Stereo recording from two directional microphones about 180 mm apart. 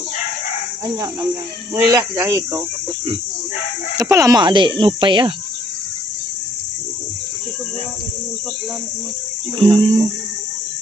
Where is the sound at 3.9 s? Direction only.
15° right (ahead or behind).